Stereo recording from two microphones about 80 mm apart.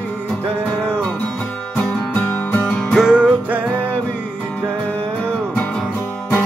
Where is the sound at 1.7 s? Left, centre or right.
Centre.